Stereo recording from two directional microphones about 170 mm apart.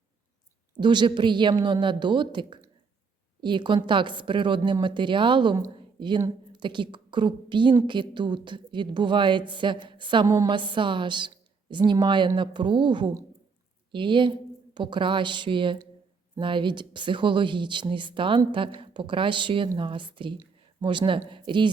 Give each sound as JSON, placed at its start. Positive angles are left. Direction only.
{"t": 0.8, "sound": "a woman's voice", "side_deg": -25}